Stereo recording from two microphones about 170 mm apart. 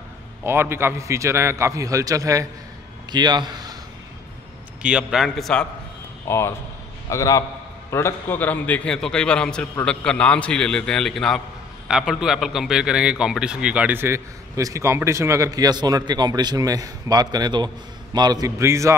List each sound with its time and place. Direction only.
0.4 s a man's voice: 15° right (ahead or behind)
4.8 s a man's voice: 5° right (ahead or behind)
6.2 s a man's voice: 15° left (ahead or behind); by 18.9 s 15° right (ahead or behind)